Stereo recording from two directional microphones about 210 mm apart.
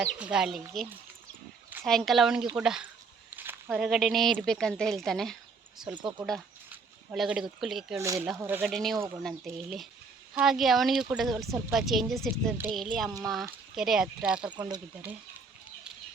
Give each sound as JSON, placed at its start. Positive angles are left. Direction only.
{"t": 0.0, "sound": "a woman's voice", "side_deg": -5}
{"t": 1.8, "sound": "a woman's voice", "side_deg": 0}
{"t": 6.7, "sound": "a sound", "side_deg": -5}
{"t": 7.6, "sound": "a woman's voice", "side_deg": 0}
{"t": 7.9, "sound": "speech", "side_deg": -15}
{"t": 8.7, "sound": "a woman's voice", "side_deg": 0}
{"t": 14.5, "sound": "speech", "side_deg": -20}